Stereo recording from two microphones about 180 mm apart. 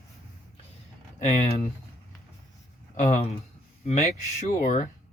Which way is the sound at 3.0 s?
35° left (ahead or behind).